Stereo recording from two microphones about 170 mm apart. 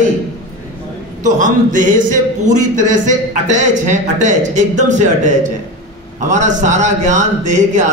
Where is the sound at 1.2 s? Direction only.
50° right (ahead or behind).